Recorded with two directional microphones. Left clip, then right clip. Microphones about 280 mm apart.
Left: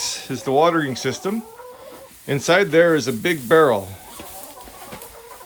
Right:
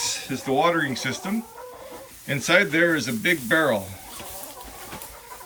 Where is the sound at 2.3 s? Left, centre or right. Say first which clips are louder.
Left 4 dB; centre.